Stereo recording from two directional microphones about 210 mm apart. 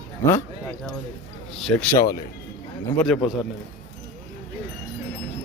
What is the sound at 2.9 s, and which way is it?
Speech, centre (ahead or behind).